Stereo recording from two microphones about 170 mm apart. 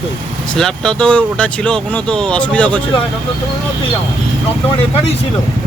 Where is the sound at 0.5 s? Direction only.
5° left (ahead or behind).